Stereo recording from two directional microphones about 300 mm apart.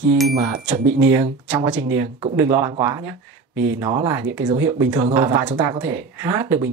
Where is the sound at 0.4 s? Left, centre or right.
Right.